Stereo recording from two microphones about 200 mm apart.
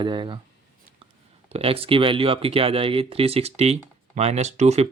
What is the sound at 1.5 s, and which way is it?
Speech, 30° right (ahead or behind).